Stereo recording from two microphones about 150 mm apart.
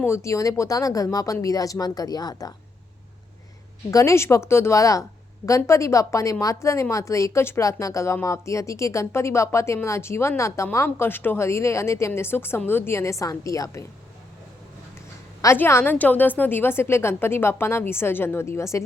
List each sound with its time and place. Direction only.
0.0 s speech: 20° left (ahead or behind)
3.9 s speech: 20° left (ahead or behind)
15.4 s a woman's voice: 15° left (ahead or behind)